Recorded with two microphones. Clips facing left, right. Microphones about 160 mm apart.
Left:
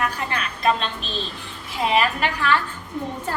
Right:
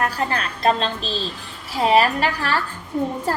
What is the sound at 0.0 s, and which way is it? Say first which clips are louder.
A woman's voice: right 3 dB; 35° right (ahead or behind).